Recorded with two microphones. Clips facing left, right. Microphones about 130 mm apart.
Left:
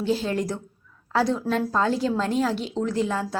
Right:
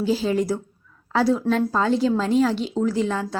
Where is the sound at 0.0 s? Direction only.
Centre (ahead or behind).